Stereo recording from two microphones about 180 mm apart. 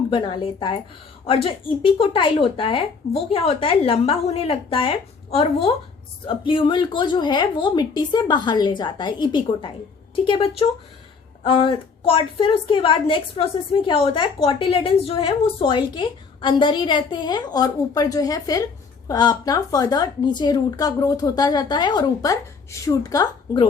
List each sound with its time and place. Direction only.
0.1 s a woman's voice: 25° left (ahead or behind)